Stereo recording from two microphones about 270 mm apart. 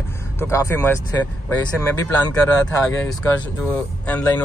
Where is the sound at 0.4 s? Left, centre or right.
Centre.